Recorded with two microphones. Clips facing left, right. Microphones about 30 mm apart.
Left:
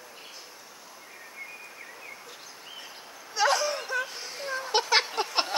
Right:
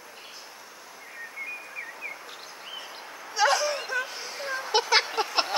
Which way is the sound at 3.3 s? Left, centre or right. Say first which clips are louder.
Right 1 dB; centre.